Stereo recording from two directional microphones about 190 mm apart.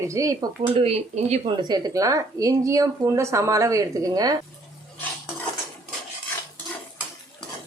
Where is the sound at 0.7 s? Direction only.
30° right (ahead or behind).